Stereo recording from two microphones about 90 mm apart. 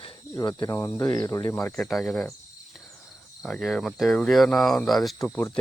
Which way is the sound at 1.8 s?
Centre (ahead or behind).